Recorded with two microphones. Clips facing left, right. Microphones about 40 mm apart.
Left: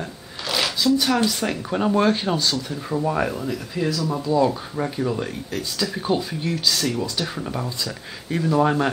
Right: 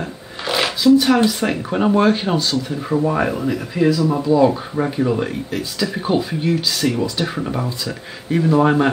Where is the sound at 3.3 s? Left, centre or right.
Right.